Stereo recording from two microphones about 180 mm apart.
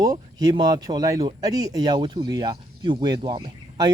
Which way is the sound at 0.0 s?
20° right (ahead or behind).